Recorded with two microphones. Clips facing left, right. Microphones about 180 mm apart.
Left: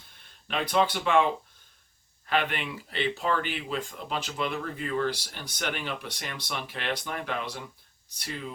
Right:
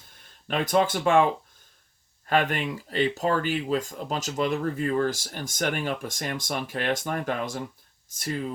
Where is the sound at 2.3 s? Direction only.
45° right (ahead or behind).